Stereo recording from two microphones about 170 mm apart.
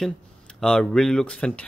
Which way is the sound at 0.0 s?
5° left (ahead or behind).